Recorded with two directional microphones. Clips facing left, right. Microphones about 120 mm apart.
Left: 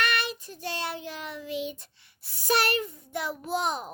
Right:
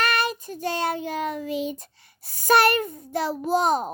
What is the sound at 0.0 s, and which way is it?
Child singing, 45° right (ahead or behind).